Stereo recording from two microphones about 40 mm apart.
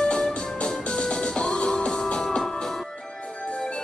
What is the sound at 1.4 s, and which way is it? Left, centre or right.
Music, left.